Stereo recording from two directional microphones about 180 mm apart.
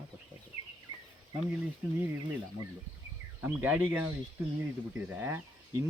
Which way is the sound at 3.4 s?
10° right (ahead or behind).